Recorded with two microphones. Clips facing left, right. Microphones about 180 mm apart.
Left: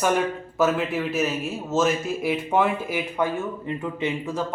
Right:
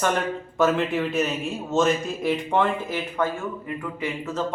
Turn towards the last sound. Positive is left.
turn(degrees=20)  # may be behind; listen again after turning